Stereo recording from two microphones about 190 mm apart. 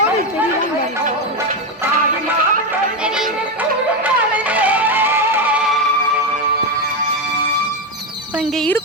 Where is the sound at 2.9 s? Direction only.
5° right (ahead or behind).